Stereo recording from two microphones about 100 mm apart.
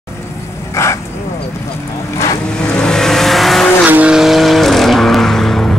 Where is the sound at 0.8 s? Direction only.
30° left (ahead or behind).